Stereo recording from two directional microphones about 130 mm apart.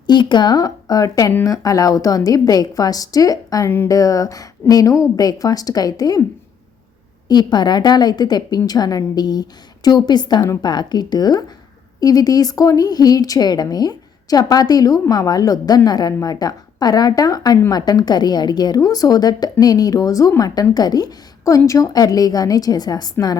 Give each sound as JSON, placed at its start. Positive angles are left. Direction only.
{"t": 0.1, "sound": "speech", "side_deg": 35}
{"t": 7.3, "sound": "a woman's voice", "side_deg": 35}